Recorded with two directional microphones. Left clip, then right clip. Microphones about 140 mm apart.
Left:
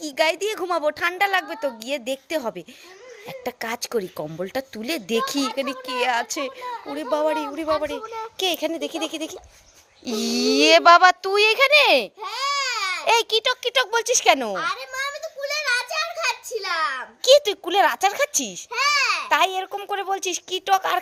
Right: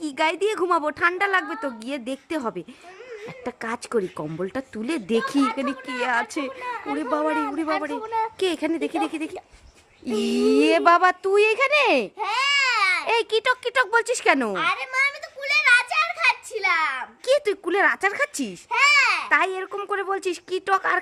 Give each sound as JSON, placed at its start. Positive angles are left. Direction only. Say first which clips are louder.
{"t": 0.0, "sound": "a woman's voice", "louder": "left 1 dB", "side_deg": 0}
{"t": 12.2, "sound": "baby cry", "louder": "right 4 dB", "side_deg": -20}
{"t": 13.1, "sound": "a woman's voice", "louder": "left 2 dB", "side_deg": 10}
{"t": 14.6, "sound": "a sound", "louder": "right 4 dB", "side_deg": -20}
{"t": 17.2, "sound": "a woman's voice", "louder": "left 5 dB", "side_deg": 0}
{"t": 18.7, "sound": "babbling", "louder": "right 3 dB", "side_deg": -25}
{"t": 19.3, "sound": "a woman's voice", "louder": "left 1 dB", "side_deg": 0}